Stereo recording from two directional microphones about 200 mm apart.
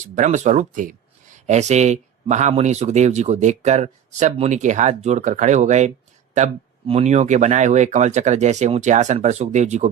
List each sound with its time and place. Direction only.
0.0 s speech: 40° right (ahead or behind)